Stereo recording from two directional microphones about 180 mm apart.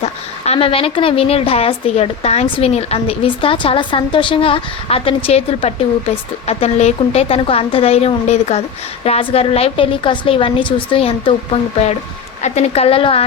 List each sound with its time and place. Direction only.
0.0 s a woman's voice: 35° left (ahead or behind)